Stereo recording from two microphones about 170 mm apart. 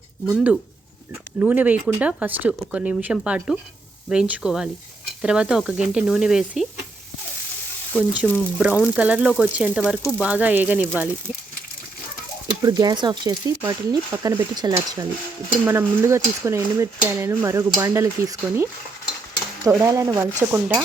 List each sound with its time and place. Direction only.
0.3 s sizzle: 5° right (ahead or behind)
1.4 s speech: 10° right (ahead or behind)
4.1 s sizzle: 5° right (ahead or behind)
7.9 s frying: 5° left (ahead or behind)
8.5 s speech: 10° right (ahead or behind)
9.4 s sizzle: 5° right (ahead or behind)
10.1 s speech: 10° right (ahead or behind)
12.6 s speech: 25° right (ahead or behind)